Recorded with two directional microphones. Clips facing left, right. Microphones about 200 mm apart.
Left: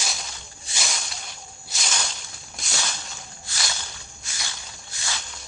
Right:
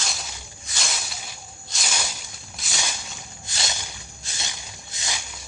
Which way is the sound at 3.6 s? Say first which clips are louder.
Right 2 dB; 20° right (ahead or behind).